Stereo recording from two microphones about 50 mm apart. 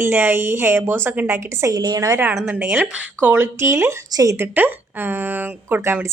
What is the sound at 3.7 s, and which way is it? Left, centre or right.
Speech, right.